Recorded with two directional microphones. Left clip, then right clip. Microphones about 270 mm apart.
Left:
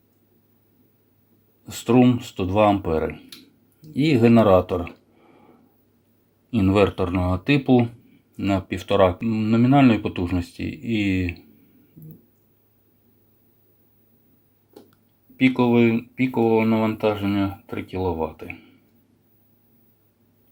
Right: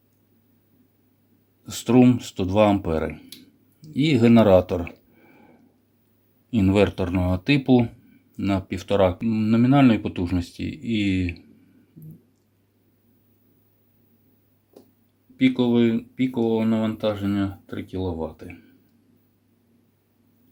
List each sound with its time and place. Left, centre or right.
1.6 s speech: centre
6.5 s speech: centre
15.4 s speech: centre